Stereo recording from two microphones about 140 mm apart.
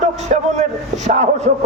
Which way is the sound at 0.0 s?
55° right (ahead or behind).